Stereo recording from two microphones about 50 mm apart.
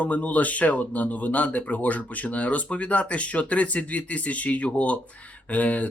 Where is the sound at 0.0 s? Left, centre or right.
Left.